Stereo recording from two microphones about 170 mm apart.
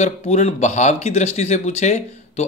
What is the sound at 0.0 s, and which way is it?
Speech, 40° left (ahead or behind).